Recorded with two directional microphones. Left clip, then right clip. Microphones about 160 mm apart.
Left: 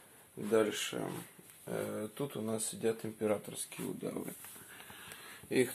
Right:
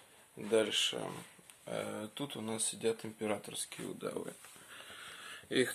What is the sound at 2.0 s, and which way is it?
Speech, 25° right (ahead or behind).